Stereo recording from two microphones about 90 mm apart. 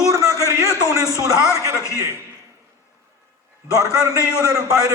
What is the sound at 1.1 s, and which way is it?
Speech, 40° right (ahead or behind).